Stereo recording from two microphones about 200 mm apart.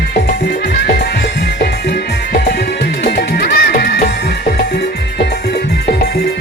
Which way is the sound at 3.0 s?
55° left (ahead or behind).